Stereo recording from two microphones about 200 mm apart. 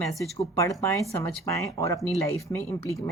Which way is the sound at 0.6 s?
15° left (ahead or behind).